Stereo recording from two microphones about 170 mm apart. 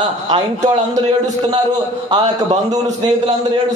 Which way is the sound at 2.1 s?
40° right (ahead or behind).